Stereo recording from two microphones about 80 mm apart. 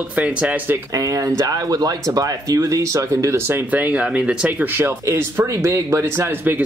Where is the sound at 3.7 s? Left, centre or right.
Centre; by 6.3 s right.